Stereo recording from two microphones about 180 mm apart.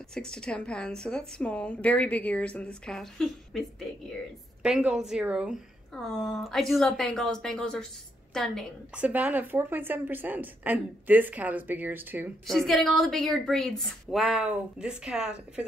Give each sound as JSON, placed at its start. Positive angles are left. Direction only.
{"t": 0.1, "sound": "a woman's voice", "side_deg": 5}
{"t": 4.6, "sound": "a woman's voice", "side_deg": -5}
{"t": 9.0, "sound": "a woman's voice", "side_deg": -10}
{"t": 12.4, "sound": "a woman's voice", "side_deg": 0}